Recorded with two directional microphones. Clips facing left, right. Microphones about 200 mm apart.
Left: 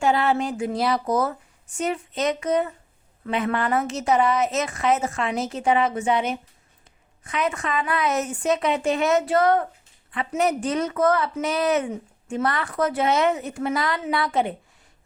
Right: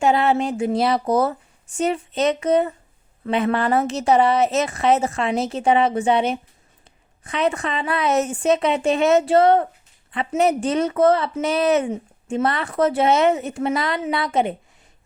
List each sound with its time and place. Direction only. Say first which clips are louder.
0.0 s a woman's voice: right 3 dB; 25° right (ahead or behind)